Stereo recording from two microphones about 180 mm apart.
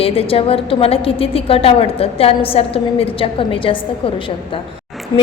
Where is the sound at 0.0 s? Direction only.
30° left (ahead or behind).